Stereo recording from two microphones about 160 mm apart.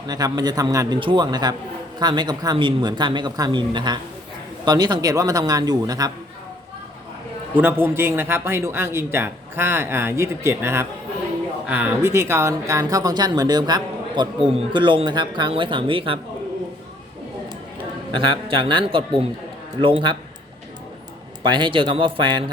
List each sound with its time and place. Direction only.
0.1 s speech: 25° right (ahead or behind)
7.5 s speech: 10° right (ahead or behind); by 16.2 s 35° right (ahead or behind)
18.1 s speech: 30° right (ahead or behind)
21.4 s speech: 30° right (ahead or behind)